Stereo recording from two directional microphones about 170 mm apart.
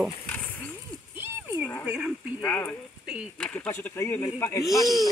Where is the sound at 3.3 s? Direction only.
5° left (ahead or behind).